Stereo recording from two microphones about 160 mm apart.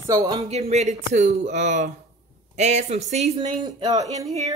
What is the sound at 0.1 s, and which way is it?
Speech, 20° right (ahead or behind).